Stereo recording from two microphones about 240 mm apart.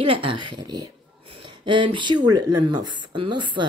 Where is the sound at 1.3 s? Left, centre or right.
Centre.